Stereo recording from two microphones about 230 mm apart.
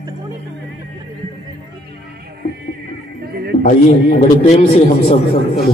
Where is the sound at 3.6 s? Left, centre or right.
Left.